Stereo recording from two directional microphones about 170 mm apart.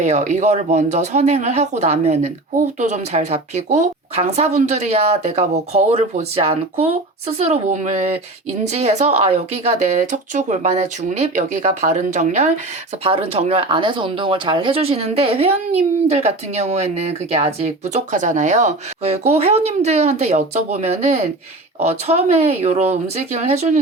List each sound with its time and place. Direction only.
0.0 s a woman's voice: 45° right (ahead or behind)